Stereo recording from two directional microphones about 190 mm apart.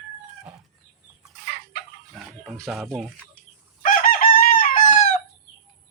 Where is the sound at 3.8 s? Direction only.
45° left (ahead or behind).